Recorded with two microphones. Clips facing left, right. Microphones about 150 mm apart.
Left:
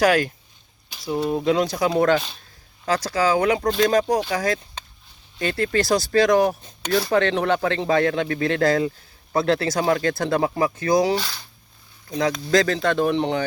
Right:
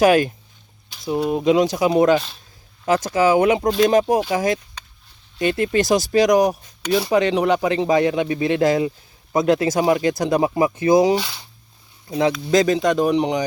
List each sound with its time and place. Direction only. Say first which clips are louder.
0.0 s speech: right 4 dB; 20° right (ahead or behind)